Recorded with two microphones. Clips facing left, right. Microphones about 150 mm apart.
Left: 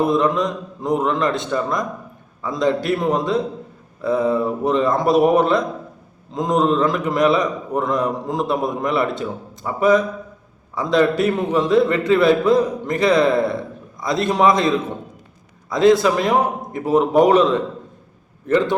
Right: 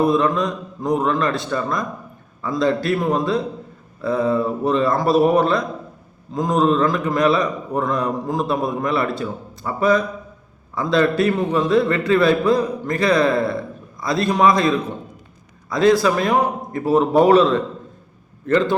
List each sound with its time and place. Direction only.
0.0 s a man's voice: 20° left (ahead or behind)
15.7 s a man's voice: 20° left (ahead or behind)